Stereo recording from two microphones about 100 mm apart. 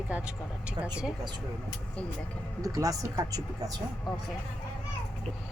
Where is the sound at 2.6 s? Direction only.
35° right (ahead or behind).